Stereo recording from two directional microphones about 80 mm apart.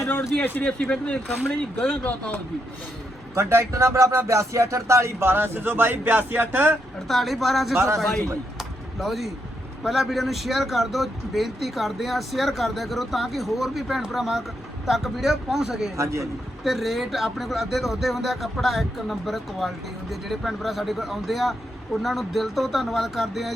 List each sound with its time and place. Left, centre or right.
0.4 s speech: left
3.3 s speech: right
7.1 s speech: centre
7.8 s speech: right
8.5 s a sound: centre
9.8 s speech: centre